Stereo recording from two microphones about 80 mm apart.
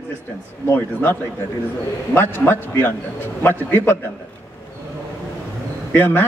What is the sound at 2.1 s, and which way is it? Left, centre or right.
A man's voice, left.